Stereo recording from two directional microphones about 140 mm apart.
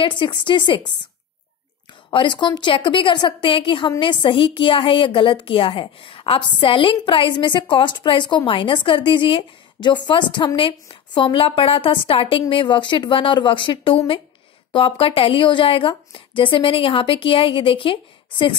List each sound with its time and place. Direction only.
0.0 s a woman's voice: 35° left (ahead or behind)
2.0 s a woman's voice: 35° left (ahead or behind)